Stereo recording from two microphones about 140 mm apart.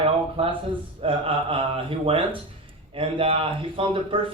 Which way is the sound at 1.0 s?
40° right (ahead or behind).